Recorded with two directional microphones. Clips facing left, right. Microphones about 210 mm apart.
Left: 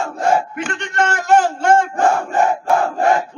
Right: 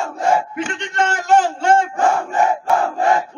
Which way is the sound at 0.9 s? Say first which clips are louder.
Left 1 dB; 55° left (ahead or behind).